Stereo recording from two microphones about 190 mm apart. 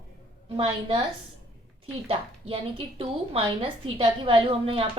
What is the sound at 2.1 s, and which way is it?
A woman's voice, 30° right (ahead or behind).